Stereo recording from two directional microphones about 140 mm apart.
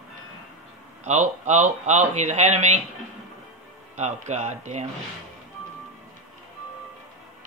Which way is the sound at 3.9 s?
55° right (ahead or behind).